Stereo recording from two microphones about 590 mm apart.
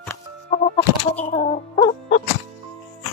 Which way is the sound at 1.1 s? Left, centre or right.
Centre.